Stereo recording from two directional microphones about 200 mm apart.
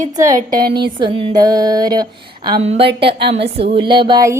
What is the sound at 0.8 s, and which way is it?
A woman's voice, 25° right (ahead or behind).